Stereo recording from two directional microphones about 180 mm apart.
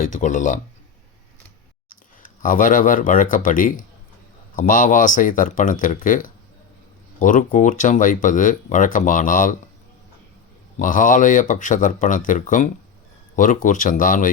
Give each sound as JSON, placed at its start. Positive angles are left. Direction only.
{"t": 0.0, "sound": "speech", "side_deg": 45}
{"t": 2.2, "sound": "speech", "side_deg": 50}
{"t": 10.8, "sound": "speech", "side_deg": 45}